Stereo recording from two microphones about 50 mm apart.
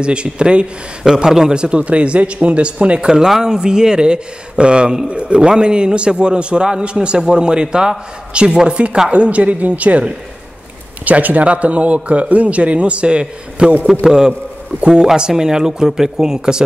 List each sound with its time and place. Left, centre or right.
0.0 s a man's voice: right